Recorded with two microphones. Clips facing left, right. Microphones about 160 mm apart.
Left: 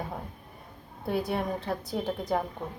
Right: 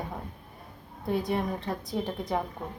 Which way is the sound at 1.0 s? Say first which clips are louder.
Right 1 dB; centre (ahead or behind).